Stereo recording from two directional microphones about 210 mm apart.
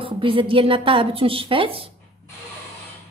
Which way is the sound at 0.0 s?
25° right (ahead or behind).